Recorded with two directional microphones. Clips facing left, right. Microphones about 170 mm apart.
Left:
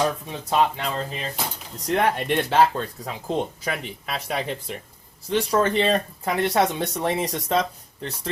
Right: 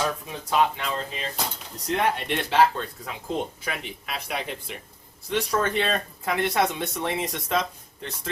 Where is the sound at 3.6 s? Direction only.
35° left (ahead or behind).